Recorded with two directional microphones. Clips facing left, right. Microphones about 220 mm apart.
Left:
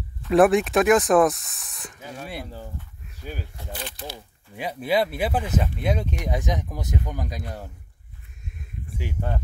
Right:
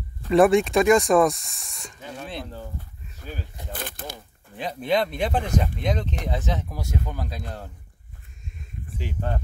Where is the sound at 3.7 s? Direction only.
55° right (ahead or behind).